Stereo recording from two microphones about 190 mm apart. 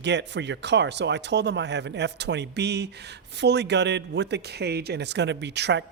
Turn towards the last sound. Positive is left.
turn(degrees=-65)  # may be behind; listen again after turning